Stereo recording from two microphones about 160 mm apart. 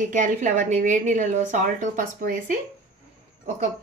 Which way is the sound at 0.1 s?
50° right (ahead or behind).